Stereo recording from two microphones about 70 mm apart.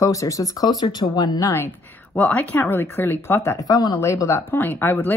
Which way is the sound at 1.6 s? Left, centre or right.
Left.